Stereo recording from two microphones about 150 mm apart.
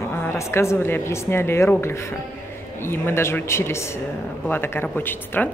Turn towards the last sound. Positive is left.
turn(degrees=15)  # may be behind; listen again after turning